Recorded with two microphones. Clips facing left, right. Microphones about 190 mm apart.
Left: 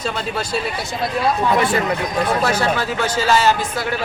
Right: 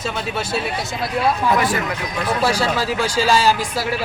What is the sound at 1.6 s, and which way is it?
Speech, 30° left (ahead or behind).